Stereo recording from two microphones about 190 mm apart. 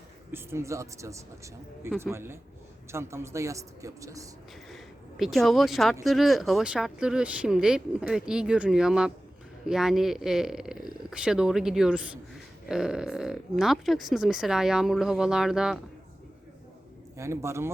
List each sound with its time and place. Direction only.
0.3 s a man's voice: 15° right (ahead or behind)
4.7 s speech: centre (ahead or behind)
17.2 s a man's voice: 15° right (ahead or behind)